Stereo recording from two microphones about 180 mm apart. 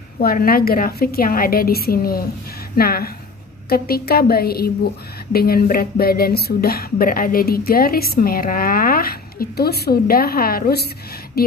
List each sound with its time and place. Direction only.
0.2 s speech: 55° left (ahead or behind)